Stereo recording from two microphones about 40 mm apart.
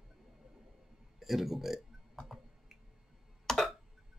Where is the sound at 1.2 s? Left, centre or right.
Centre.